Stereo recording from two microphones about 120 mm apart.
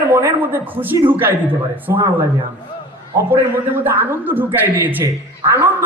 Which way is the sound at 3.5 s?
15° right (ahead or behind).